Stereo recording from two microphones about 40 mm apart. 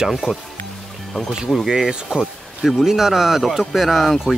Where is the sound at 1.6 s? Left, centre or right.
Centre.